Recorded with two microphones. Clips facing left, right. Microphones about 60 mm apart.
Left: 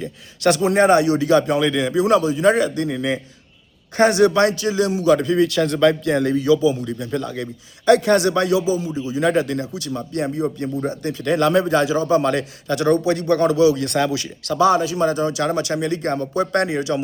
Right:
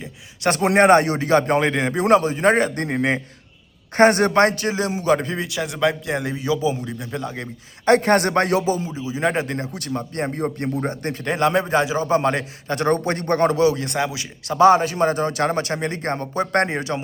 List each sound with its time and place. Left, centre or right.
0.6 s a man's voice: right
5.5 s a man's voice: centre
7.9 s a man's voice: right
8.9 s a man's voice: right
11.2 s a man's voice: right
13.8 s a man's voice: centre
14.6 s a man's voice: right